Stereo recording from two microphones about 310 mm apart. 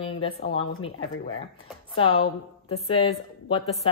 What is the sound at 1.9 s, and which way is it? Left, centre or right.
A woman's voice, centre.